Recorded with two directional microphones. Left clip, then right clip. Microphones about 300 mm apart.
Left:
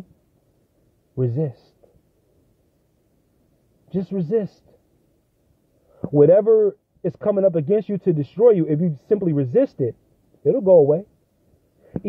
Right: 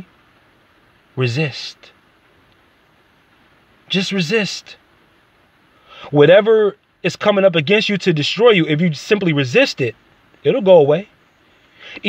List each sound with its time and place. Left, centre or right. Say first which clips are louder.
1.1 s speech: right 4 dB; right
3.9 s speech: right 5 dB; right
6.1 s speech: right 4 dB; right